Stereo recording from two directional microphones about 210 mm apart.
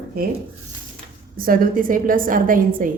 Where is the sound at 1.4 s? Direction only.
40° right (ahead or behind).